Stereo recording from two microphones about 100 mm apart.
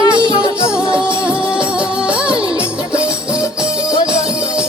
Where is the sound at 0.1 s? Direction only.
55° right (ahead or behind).